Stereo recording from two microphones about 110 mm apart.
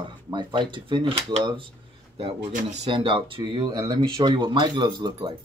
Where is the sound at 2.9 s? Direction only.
50° right (ahead or behind).